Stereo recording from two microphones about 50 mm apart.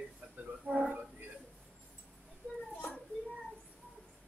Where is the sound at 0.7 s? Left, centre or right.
Centre.